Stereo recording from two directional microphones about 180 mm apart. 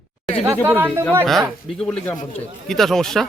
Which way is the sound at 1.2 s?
Centre (ahead or behind).